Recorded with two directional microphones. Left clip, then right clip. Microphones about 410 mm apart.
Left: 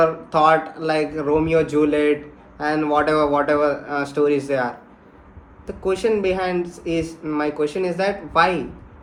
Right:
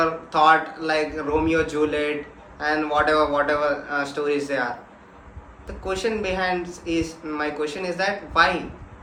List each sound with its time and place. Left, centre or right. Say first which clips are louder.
0.0 s speech: left 2 dB; centre
5.8 s speech: left 5 dB; centre